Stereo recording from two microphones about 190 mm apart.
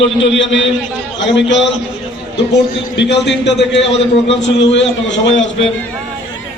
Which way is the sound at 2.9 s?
65° left (ahead or behind).